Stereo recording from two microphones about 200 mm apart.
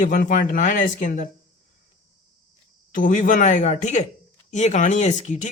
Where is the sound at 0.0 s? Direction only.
45° left (ahead or behind).